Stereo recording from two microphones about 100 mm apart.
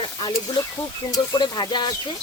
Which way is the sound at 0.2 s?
45° left (ahead or behind).